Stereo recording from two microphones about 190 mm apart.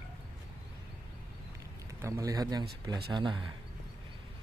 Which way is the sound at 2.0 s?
15° right (ahead or behind).